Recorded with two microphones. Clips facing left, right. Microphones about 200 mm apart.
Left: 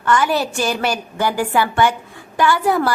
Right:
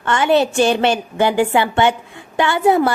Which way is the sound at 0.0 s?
25° right (ahead or behind).